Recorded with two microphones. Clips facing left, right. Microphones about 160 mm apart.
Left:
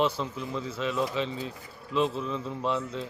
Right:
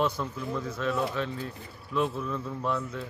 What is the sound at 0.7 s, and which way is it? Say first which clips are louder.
A man's voice: left 1 dB; 10° left (ahead or behind).